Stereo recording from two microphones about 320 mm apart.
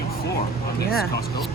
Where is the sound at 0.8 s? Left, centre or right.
Left.